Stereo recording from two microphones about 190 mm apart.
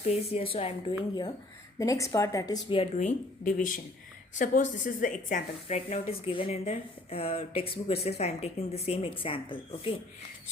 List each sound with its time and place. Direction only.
0.0 s speech: 30° left (ahead or behind)
1.8 s a woman's voice: 15° left (ahead or behind)